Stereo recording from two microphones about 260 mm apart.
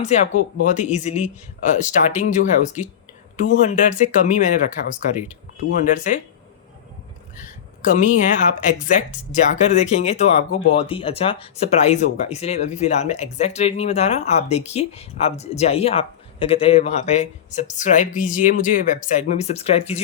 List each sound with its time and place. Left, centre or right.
0.0 s speech: left
7.9 s speech: left